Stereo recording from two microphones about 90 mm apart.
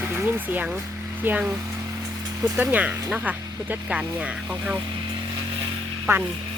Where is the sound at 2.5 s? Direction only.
15° right (ahead or behind).